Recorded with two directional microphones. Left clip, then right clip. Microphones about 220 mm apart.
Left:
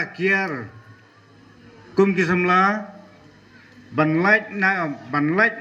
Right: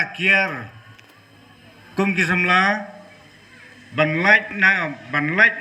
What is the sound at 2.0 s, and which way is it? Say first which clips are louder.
Speech: even; 10° left (ahead or behind).